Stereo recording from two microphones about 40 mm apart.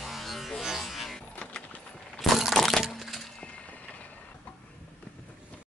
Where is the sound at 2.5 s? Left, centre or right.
Centre.